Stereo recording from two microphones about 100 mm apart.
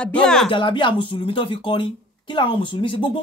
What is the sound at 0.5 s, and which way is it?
Speech, 55° left (ahead or behind).